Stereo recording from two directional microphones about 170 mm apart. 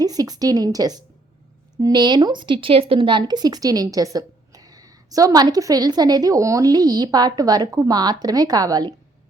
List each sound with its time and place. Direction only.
0.0 s speech: 20° right (ahead or behind)